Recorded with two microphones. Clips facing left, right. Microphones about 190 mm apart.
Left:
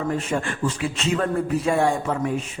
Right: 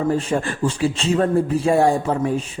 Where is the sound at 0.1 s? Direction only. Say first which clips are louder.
Right 4 dB; 30° right (ahead or behind).